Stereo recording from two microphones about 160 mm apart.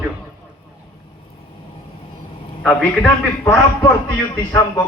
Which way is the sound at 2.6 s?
10° left (ahead or behind).